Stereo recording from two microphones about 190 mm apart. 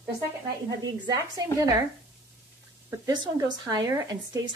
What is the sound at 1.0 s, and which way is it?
Speech, 20° right (ahead or behind).